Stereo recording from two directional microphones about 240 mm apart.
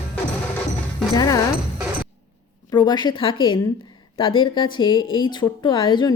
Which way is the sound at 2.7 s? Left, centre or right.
Centre.